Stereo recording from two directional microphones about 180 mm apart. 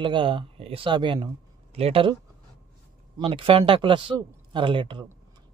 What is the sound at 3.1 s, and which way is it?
Speech, 30° right (ahead or behind).